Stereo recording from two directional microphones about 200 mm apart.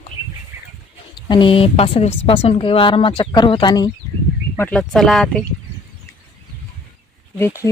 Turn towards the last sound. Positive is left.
turn(degrees=15)  # may be behind; listen again after turning